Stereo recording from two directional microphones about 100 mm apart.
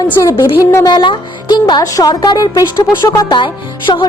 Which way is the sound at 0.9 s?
50° left (ahead or behind).